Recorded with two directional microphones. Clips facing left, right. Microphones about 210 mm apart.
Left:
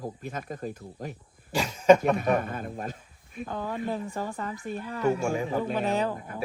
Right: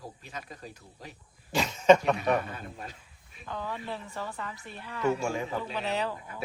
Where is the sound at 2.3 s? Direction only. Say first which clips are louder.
Left 3 dB; 50° left (ahead or behind).